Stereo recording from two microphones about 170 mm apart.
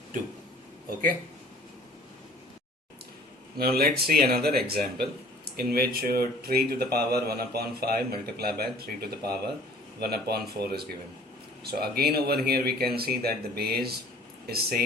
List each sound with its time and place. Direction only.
3.6 s speech: 65° right (ahead or behind)